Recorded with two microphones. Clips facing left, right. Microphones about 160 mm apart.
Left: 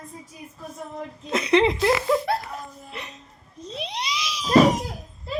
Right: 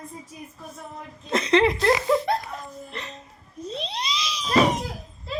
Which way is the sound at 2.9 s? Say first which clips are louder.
Right 1 dB; 5° left (ahead or behind).